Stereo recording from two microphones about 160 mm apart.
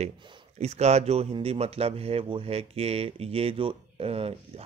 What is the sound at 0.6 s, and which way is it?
Speech, 45° right (ahead or behind).